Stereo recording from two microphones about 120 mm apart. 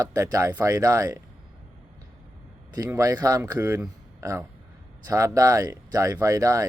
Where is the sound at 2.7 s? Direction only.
25° right (ahead or behind).